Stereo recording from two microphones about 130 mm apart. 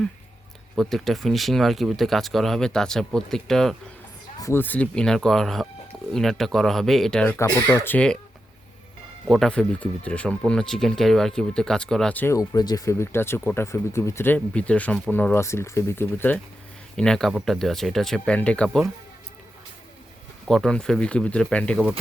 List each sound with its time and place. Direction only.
0.8 s speech: centre (ahead or behind)
4.4 s speech: 25° left (ahead or behind)
4.6 s speech: 10° left (ahead or behind)
9.2 s speech: centre (ahead or behind)
12.4 s speech: 30° left (ahead or behind)
17.0 s speech: 5° left (ahead or behind)
20.5 s speech: 5° left (ahead or behind)